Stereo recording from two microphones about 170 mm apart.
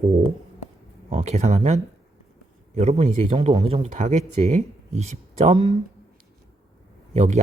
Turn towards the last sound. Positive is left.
turn(degrees=-40)  # may be behind; listen again after turning